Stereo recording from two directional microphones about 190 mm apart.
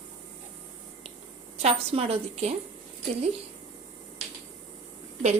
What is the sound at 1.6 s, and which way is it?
Speech, 30° right (ahead or behind).